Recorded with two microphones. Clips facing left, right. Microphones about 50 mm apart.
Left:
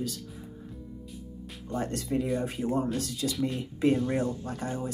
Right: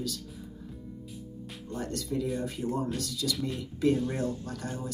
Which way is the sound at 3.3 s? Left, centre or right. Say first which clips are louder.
Left 4 dB; centre.